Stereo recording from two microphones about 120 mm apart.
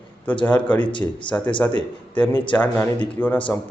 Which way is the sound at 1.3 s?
20° left (ahead or behind).